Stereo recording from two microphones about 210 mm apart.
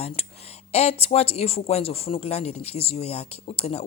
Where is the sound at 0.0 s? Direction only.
30° left (ahead or behind).